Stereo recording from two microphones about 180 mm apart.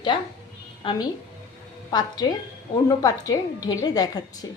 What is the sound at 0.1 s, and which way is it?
A woman's voice, 30° left (ahead or behind).